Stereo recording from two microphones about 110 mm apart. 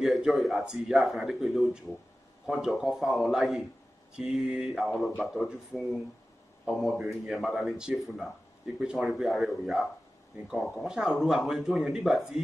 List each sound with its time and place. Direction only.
0.0 s speech: centre (ahead or behind)